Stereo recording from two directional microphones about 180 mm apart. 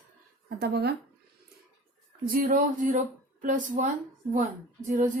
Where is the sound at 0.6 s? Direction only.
65° right (ahead or behind).